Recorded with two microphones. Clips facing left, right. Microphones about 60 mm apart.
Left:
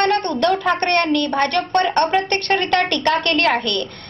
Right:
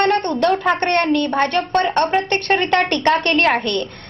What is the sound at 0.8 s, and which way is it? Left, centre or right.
Speech, right.